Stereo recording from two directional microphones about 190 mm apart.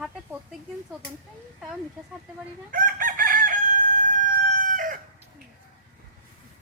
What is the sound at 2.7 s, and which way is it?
Chicken, 45° right (ahead or behind).